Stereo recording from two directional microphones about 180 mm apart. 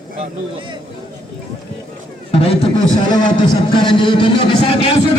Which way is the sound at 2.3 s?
35° left (ahead or behind).